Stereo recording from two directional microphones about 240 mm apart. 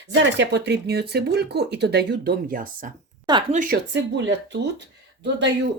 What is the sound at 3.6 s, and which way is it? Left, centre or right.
Speech, right.